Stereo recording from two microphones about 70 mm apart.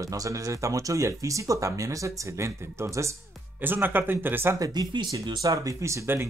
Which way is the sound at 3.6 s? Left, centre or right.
Right.